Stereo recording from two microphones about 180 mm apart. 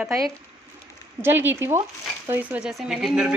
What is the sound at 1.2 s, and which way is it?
A woman's voice, 10° right (ahead or behind).